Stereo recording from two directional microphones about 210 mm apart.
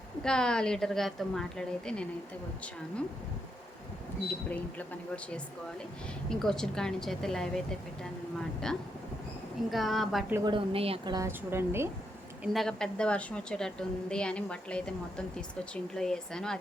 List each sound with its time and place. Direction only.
0.2 s a woman's voice: 5° left (ahead or behind)
4.4 s a woman's voice: 5° left (ahead or behind)
10.3 s a woman's voice: 20° right (ahead or behind)
12.4 s a woman's voice: centre (ahead or behind)